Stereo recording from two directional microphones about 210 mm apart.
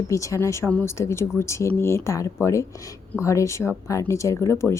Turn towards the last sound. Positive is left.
turn(degrees=10)  # may be behind; listen again after turning